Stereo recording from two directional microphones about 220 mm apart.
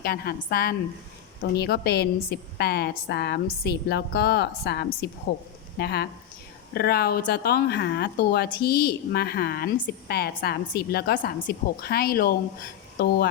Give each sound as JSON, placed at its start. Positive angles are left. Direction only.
{"t": 0.0, "sound": "a woman's voice", "side_deg": 45}